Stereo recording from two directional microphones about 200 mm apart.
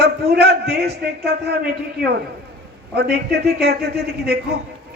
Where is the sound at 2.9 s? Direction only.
55° right (ahead or behind).